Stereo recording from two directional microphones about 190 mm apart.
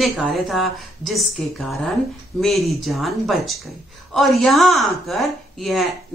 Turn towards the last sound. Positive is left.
turn(degrees=0)  # may be behind; listen again after turning